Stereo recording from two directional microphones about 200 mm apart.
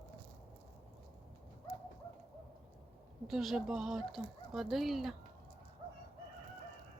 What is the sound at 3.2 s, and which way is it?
Speech, centre (ahead or behind).